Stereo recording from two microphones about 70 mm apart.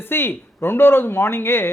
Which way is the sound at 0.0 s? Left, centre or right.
Left.